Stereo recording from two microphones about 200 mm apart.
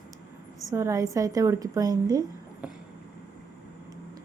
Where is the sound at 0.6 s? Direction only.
15° right (ahead or behind).